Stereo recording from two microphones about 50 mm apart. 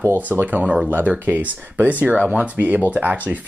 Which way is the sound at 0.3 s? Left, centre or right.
Right.